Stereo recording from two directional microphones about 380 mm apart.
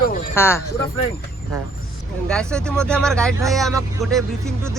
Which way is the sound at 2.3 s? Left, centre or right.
Centre.